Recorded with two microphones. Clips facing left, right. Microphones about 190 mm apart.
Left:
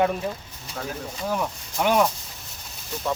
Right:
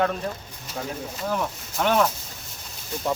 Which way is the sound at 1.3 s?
10° left (ahead or behind).